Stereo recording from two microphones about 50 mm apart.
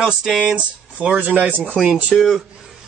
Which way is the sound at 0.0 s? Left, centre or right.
Centre.